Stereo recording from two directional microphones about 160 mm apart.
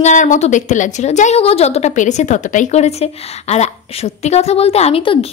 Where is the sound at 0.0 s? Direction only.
50° left (ahead or behind).